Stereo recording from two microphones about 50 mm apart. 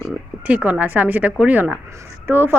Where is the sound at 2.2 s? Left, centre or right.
Right.